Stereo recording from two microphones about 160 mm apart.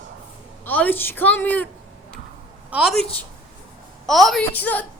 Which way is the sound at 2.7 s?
5° right (ahead or behind).